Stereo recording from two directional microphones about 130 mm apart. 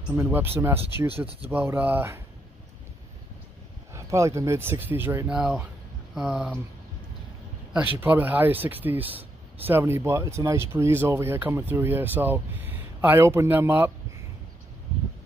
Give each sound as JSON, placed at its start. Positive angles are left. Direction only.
{"t": 0.1, "sound": "speech", "side_deg": -20}
{"t": 1.1, "sound": "speech", "side_deg": -45}
{"t": 1.5, "sound": "speech", "side_deg": -15}
{"t": 3.9, "sound": "speech", "side_deg": -25}
{"t": 5.3, "sound": "speech", "side_deg": -5}
{"t": 7.7, "sound": "speech", "side_deg": -15}
{"t": 9.0, "sound": "a sound", "side_deg": -45}
{"t": 9.7, "sound": "speech", "side_deg": -20}